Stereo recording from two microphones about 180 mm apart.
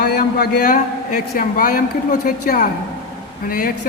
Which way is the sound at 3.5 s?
55° left (ahead or behind).